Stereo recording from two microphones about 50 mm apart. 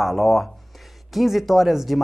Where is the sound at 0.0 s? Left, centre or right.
Centre.